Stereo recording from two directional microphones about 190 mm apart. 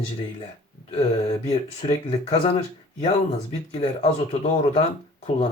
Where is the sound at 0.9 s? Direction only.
35° left (ahead or behind).